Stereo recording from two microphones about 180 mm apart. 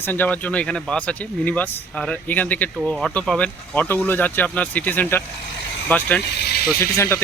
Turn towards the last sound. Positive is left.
turn(degrees=15)  # may be behind; listen again after turning